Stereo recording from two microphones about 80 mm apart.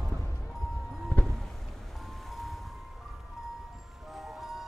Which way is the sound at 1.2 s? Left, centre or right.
Left.